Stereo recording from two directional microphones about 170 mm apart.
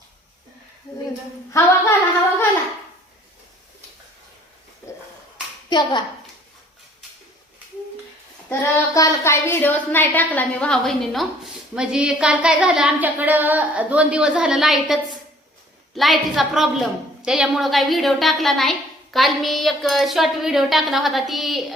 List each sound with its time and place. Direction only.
1.5 s a woman's voice: 15° left (ahead or behind)
5.6 s a child's voice: 25° left (ahead or behind)
8.4 s a woman's voice: 20° left (ahead or behind); by 21.6 s centre (ahead or behind)